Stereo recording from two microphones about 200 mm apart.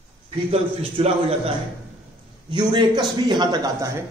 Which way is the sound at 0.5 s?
30° right (ahead or behind).